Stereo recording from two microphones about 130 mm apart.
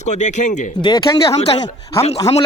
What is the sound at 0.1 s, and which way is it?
Speech, 65° left (ahead or behind).